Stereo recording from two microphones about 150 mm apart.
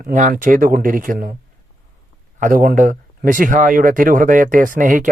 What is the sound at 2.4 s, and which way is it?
Speech, 65° right (ahead or behind).